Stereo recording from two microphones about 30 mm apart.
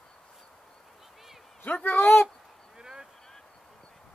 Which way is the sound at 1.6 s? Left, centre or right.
Left.